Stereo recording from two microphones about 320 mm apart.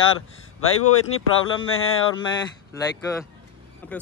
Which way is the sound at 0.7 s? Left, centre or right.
Left.